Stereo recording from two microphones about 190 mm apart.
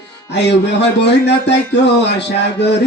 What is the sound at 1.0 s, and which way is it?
Music, 65° left (ahead or behind).